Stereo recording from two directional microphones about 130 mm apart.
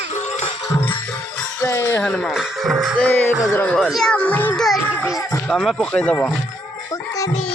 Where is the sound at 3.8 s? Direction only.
Centre (ahead or behind).